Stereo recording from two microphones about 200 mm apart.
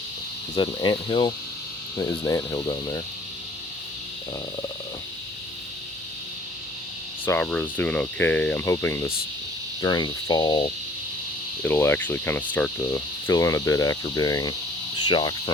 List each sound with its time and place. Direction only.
0.5 s speech: 20° left (ahead or behind)
7.3 s speech: 10° left (ahead or behind)
15.0 s cricket: 20° left (ahead or behind)